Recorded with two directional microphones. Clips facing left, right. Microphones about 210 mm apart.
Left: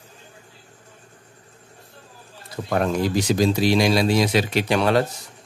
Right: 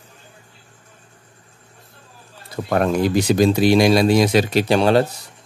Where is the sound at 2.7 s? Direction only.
60° right (ahead or behind); by 5.0 s 30° right (ahead or behind).